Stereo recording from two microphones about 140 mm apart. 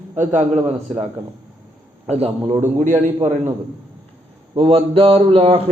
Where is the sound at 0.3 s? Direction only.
50° right (ahead or behind).